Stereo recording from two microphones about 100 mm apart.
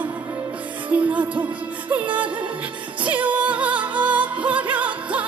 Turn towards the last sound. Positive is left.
turn(degrees=-15)  # may be behind; listen again after turning